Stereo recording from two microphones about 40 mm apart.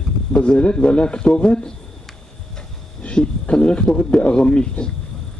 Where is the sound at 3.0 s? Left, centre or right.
Left.